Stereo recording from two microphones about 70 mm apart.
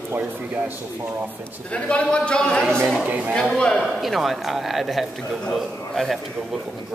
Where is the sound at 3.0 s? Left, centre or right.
Right.